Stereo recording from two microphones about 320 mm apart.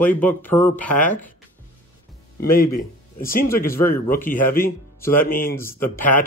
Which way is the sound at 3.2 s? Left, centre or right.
Left.